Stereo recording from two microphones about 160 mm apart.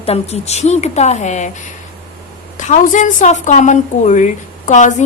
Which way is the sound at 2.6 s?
50° left (ahead or behind).